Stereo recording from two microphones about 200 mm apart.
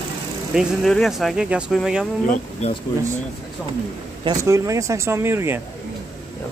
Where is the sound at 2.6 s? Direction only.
30° left (ahead or behind).